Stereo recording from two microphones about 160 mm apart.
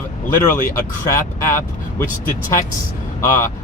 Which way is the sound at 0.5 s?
20° left (ahead or behind).